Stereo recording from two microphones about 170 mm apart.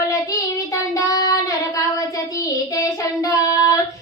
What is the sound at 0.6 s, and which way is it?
Child singing, 20° left (ahead or behind).